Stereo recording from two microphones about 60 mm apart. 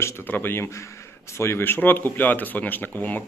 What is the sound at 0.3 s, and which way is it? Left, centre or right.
Speech, left.